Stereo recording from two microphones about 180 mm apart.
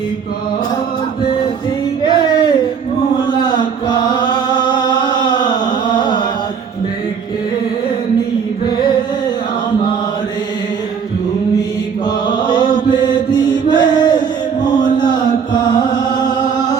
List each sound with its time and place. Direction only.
2.0 s a sound: 25° left (ahead or behind)
3.2 s chant: 25° left (ahead or behind)
12.0 s mantra: 25° left (ahead or behind)
13.7 s music: 25° left (ahead or behind)
14.9 s chant: 25° left (ahead or behind)